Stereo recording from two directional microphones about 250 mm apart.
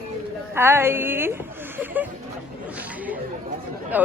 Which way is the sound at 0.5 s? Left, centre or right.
Centre.